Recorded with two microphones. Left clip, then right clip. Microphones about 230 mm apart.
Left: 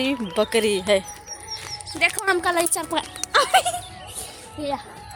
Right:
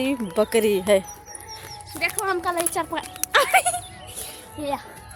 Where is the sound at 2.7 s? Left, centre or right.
Left.